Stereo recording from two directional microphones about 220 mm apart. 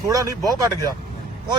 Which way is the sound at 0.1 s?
15° right (ahead or behind).